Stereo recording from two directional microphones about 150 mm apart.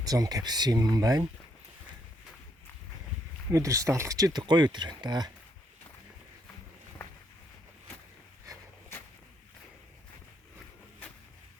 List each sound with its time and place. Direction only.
0.0 s speech: 25° right (ahead or behind)
3.5 s speech: 20° right (ahead or behind)